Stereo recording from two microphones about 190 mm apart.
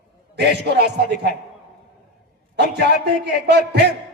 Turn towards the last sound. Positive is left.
turn(degrees=-60)  # may be behind; listen again after turning